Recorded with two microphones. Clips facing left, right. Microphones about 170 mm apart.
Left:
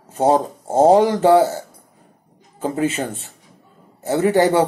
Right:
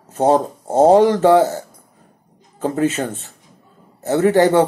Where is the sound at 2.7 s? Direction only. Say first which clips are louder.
Right 2 dB; 15° left (ahead or behind).